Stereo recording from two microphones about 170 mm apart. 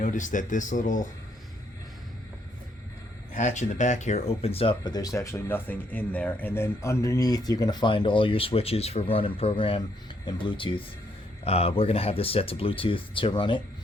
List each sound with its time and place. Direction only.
0.0 s speech: 50° left (ahead or behind)
3.3 s speech: 45° left (ahead or behind); by 13.6 s 30° left (ahead or behind)